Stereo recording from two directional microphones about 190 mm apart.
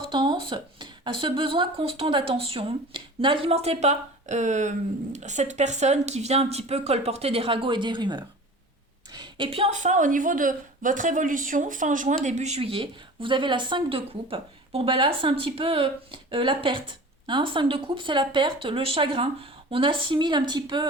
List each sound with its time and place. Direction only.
0.1 s a woman's voice: 25° right (ahead or behind)